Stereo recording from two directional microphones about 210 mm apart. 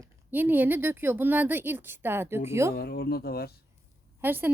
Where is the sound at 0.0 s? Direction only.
10° right (ahead or behind).